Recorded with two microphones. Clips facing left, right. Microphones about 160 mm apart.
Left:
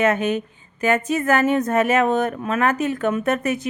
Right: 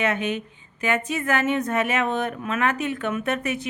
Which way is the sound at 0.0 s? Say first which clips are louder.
Left 5 dB; 45° left (ahead or behind).